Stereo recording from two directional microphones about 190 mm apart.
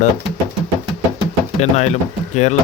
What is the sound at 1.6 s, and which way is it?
Speech, 35° left (ahead or behind).